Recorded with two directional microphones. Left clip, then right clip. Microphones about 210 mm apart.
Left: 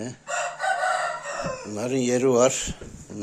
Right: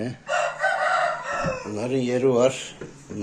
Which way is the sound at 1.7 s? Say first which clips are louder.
Left 2 dB; 35° left (ahead or behind).